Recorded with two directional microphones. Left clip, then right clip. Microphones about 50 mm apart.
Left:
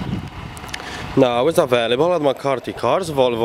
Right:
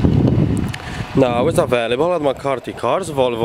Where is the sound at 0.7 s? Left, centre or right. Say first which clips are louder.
Right 1 dB; centre.